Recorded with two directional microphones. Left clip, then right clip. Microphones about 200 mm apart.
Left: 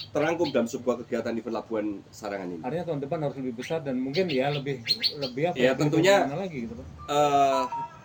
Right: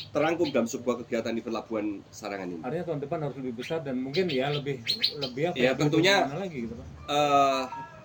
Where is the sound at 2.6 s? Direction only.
10° right (ahead or behind).